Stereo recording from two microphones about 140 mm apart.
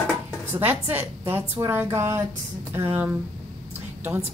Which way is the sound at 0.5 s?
15° right (ahead or behind).